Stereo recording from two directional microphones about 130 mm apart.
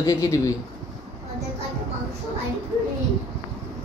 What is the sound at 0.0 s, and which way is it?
Speech, 25° left (ahead or behind).